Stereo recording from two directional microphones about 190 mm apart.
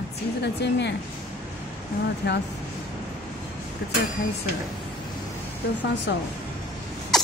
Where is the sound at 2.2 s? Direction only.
60° left (ahead or behind).